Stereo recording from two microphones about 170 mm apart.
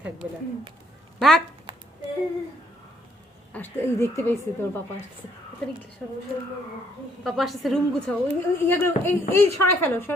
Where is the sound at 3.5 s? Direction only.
10° left (ahead or behind).